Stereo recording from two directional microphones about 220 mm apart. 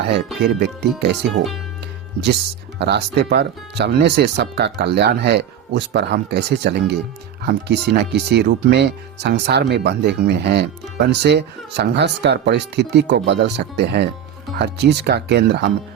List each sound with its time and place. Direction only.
0.4 s speech: 50° right (ahead or behind)
2.7 s speech: 50° right (ahead or behind)